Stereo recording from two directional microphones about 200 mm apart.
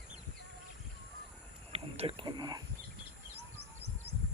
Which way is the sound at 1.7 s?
30° right (ahead or behind).